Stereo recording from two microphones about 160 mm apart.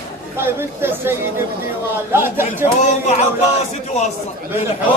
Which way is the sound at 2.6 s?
45° left (ahead or behind).